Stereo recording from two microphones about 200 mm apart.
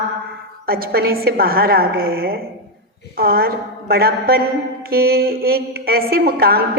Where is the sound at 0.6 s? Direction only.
50° right (ahead or behind).